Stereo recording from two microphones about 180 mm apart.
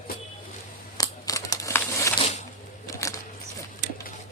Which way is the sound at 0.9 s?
20° left (ahead or behind).